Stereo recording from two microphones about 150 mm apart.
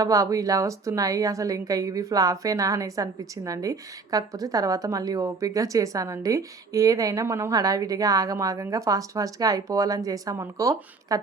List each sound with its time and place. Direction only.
0.0 s a woman's voice: 25° right (ahead or behind)